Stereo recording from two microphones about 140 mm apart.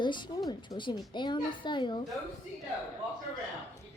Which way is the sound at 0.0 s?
35° left (ahead or behind).